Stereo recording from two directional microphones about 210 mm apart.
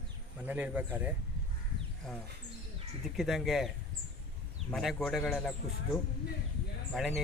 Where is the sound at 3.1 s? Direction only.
Centre (ahead or behind).